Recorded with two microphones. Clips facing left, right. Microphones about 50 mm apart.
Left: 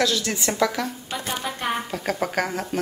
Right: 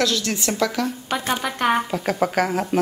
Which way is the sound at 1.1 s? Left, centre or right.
Right.